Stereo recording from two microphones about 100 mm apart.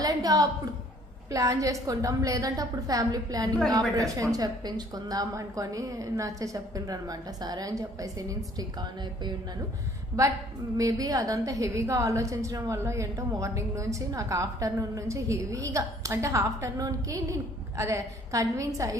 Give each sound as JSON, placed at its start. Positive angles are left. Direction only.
{"t": 0.0, "sound": "a sound", "side_deg": -40}
{"t": 1.3, "sound": "a woman's voice", "side_deg": -35}
{"t": 10.8, "sound": "a woman's voice", "side_deg": -35}